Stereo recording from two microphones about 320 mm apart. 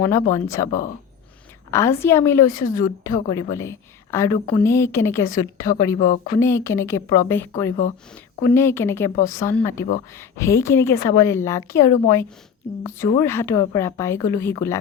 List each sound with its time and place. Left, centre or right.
0.1 s a woman's voice: centre
1.7 s a woman's voice: centre
2.5 s speech: left
2.7 s a woman's voice: centre
6.0 s speech: left
6.4 s a woman's voice: centre
10.9 s speech: left
11.2 s a woman's voice: centre